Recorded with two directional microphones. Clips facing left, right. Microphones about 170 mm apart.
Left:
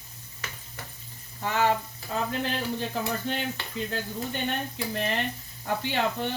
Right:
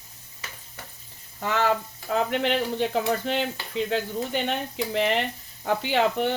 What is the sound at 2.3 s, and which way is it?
Speech, 90° right.